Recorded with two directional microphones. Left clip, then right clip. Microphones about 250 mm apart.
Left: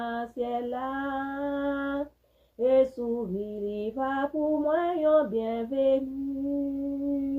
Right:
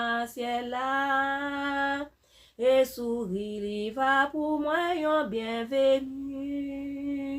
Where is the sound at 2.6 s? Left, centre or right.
Centre.